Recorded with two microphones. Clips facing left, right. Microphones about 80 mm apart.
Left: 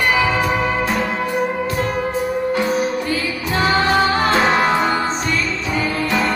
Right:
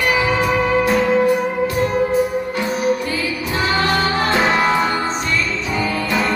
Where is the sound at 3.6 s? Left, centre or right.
Left.